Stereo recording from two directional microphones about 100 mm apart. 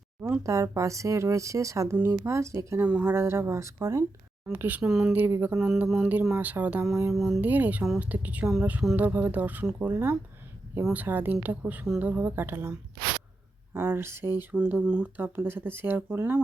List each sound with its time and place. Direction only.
0.4 s speech: 30° right (ahead or behind)
2.8 s speech: 15° right (ahead or behind); by 4.0 s 30° right (ahead or behind)
4.5 s speech: 15° right (ahead or behind)
4.9 s speech: 5° right (ahead or behind)
5.1 s speech: 20° right (ahead or behind)
5.5 s speech: 5° right (ahead or behind)
7.1 s speech: 5° right (ahead or behind)
7.4 s speech: 15° right (ahead or behind)
13.7 s speech: 25° right (ahead or behind)
14.5 s speech: 10° right (ahead or behind)